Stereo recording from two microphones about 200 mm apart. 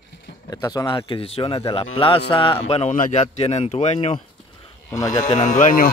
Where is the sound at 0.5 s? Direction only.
20° left (ahead or behind).